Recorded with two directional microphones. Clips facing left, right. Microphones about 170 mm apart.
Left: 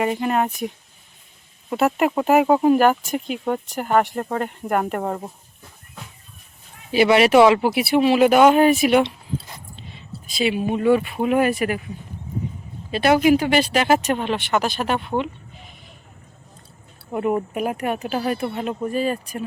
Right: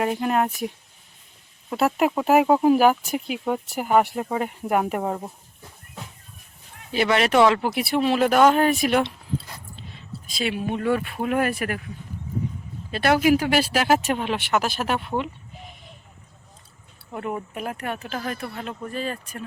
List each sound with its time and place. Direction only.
0.0 s speech: centre (ahead or behind)
1.7 s speech: centre (ahead or behind)
6.9 s speech: 5° left (ahead or behind)
12.9 s speech: centre (ahead or behind)
17.1 s speech: 20° left (ahead or behind)
18.3 s speech: 25° left (ahead or behind)